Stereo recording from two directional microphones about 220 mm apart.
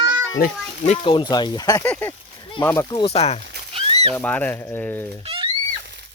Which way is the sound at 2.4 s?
20° left (ahead or behind).